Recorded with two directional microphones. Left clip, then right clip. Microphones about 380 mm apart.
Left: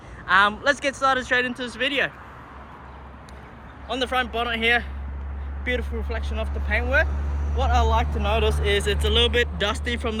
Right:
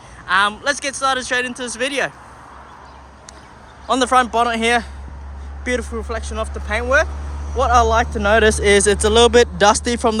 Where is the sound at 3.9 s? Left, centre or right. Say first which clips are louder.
Right 10 dB; centre.